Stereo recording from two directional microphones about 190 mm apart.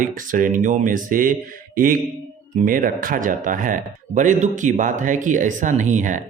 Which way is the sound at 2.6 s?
45° right (ahead or behind).